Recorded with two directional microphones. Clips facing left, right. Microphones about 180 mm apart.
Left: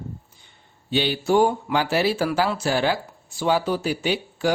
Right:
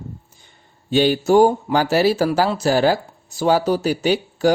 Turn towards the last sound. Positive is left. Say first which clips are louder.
# right 6 dB
turn(degrees=-40)  # may be behind; listen again after turning